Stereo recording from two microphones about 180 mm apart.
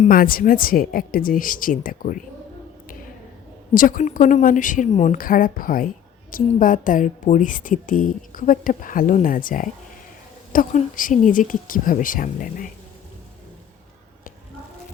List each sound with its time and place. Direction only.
0.0 s a woman's voice: 50° left (ahead or behind)
3.8 s a woman's voice: 45° left (ahead or behind)